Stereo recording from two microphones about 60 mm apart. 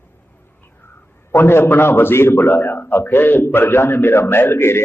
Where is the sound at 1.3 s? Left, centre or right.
Left.